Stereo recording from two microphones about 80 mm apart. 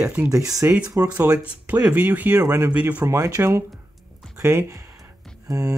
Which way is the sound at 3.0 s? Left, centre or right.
Right.